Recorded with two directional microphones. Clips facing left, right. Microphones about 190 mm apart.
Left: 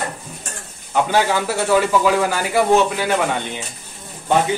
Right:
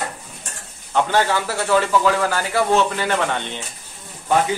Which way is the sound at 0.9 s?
10° left (ahead or behind).